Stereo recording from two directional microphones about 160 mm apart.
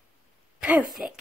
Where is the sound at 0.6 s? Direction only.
10° right (ahead or behind).